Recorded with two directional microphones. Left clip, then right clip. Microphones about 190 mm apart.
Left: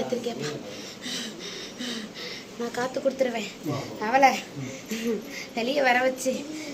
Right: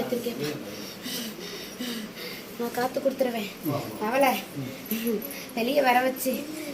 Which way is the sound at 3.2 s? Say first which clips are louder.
Left 1 dB; 15° left (ahead or behind).